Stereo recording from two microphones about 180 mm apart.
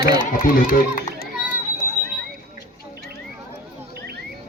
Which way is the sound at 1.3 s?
5° right (ahead or behind).